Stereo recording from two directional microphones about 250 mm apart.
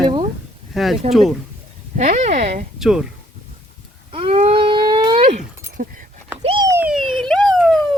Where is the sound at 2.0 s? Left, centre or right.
Right.